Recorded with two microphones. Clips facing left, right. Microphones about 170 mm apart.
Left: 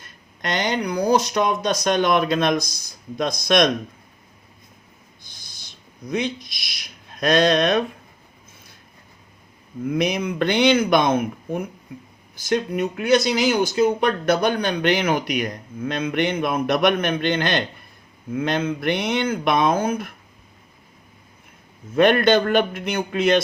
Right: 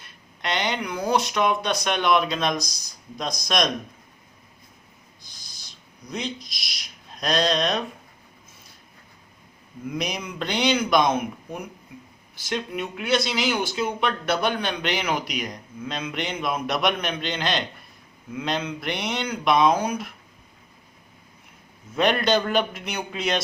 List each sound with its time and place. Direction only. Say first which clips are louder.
0.0 s speech: left 2 dB; 45° left (ahead or behind)
5.3 s owl: left 3 dB; 60° left (ahead or behind)
6.1 s speech: left 7 dB; 60° left (ahead or behind)
9.9 s speech: left 8 dB; 55° left (ahead or behind)
21.9 s speech: left 6 dB; 55° left (ahead or behind)